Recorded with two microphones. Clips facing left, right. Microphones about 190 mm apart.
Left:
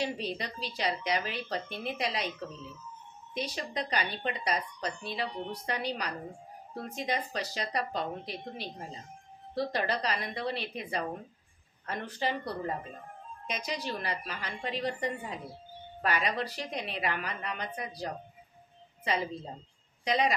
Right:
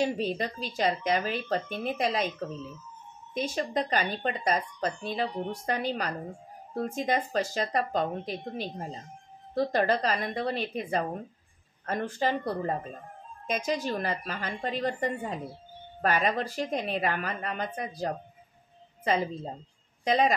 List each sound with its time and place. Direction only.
0.0 s speech: 45° right (ahead or behind)
3.3 s speech: 45° right (ahead or behind)
20.1 s speech: 45° right (ahead or behind)